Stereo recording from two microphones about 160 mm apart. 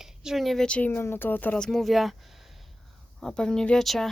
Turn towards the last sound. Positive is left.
turn(degrees=0)  # may be behind; listen again after turning